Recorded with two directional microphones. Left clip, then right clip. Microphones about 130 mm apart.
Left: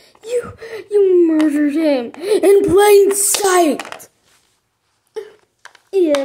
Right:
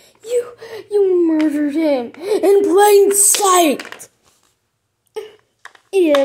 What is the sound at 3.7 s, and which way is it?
Speech, 50° left (ahead or behind).